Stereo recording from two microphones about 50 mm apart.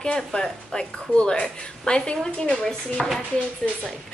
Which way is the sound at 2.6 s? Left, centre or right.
Centre.